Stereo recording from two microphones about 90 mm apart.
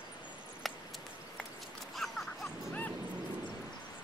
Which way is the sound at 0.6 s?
Centre (ahead or behind).